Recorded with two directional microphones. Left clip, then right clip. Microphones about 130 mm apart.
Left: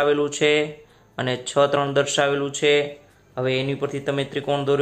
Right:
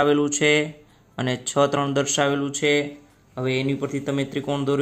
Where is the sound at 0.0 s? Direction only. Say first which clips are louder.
Even; 40° right (ahead or behind).